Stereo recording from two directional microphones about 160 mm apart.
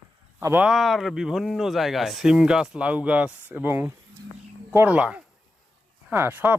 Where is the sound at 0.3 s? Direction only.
10° right (ahead or behind).